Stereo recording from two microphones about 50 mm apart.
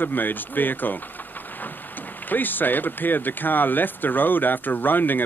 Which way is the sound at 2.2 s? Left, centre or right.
Left.